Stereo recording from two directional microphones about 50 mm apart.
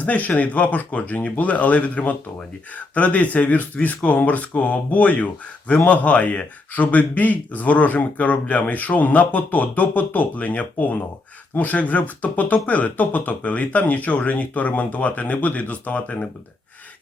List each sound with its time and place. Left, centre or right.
0.0 s speech: left